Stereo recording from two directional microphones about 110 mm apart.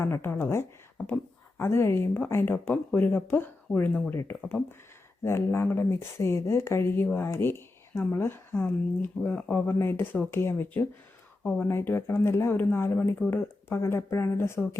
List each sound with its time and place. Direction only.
0.0 s speech: 25° left (ahead or behind)
0.9 s speech: 10° left (ahead or behind)
1.5 s speech: 20° left (ahead or behind)
11.4 s speech: 10° left (ahead or behind)
11.7 s speech: 25° left (ahead or behind)